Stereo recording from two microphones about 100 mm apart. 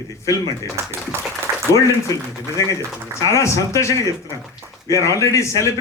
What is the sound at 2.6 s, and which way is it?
A man's voice, 35° left (ahead or behind).